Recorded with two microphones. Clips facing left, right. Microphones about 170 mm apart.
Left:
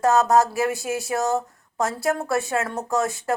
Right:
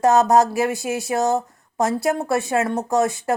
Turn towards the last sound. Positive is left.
turn(degrees=-15)  # may be behind; listen again after turning